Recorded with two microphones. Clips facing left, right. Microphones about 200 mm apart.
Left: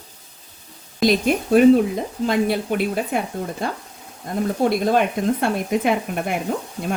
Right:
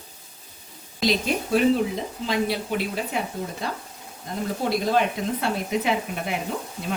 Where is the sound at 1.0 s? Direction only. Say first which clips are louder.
Left 6 dB; 55° left (ahead or behind).